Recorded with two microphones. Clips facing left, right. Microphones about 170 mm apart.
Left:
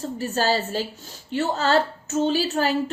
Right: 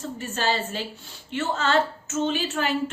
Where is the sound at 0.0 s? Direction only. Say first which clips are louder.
Left 4 dB; 35° left (ahead or behind).